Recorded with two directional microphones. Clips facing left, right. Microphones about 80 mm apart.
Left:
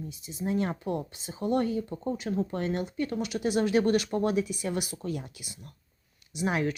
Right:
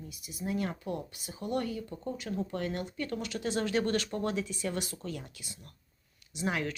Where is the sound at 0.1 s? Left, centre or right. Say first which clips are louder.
Left 4 dB; left.